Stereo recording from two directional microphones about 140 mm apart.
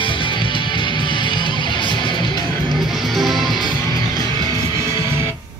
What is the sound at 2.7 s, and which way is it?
Music, centre (ahead or behind).